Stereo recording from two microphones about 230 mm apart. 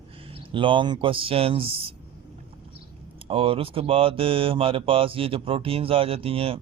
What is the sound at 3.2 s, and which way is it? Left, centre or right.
Speech, right.